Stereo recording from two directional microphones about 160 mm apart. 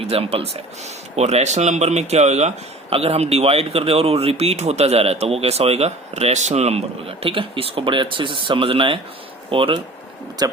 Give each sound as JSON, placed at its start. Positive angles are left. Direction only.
{"t": 0.1, "sound": "speech", "side_deg": -35}
{"t": 10.4, "sound": "speech", "side_deg": -25}